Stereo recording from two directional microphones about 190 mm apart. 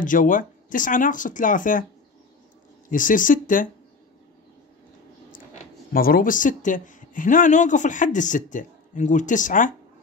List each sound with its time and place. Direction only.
0.0 s speech: 45° left (ahead or behind)
2.9 s speech: 45° left (ahead or behind)
5.3 s speech: 45° left (ahead or behind)